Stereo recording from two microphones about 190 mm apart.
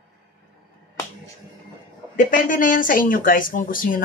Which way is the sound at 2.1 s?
45° left (ahead or behind).